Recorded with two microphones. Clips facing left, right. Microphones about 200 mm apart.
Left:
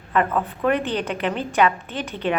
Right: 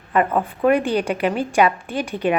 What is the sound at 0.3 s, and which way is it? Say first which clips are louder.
A woman's voice: right 4 dB; 10° right (ahead or behind).